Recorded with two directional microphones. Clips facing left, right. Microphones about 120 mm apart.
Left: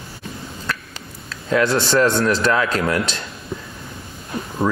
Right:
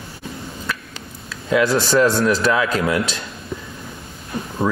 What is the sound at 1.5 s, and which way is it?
Speech, 5° right (ahead or behind).